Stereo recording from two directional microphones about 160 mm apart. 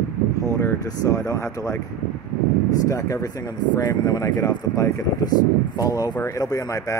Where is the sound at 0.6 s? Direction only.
20° left (ahead or behind).